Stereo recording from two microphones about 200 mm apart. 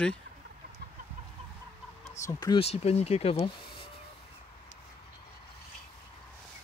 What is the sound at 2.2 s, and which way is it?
Speech, 15° left (ahead or behind).